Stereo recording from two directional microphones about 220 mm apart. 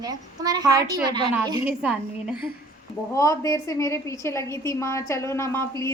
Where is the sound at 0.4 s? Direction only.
15° right (ahead or behind).